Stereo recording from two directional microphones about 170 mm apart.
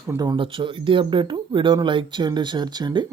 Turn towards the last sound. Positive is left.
turn(degrees=-25)  # may be behind; listen again after turning